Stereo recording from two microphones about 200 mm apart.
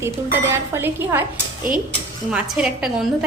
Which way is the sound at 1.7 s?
45° right (ahead or behind).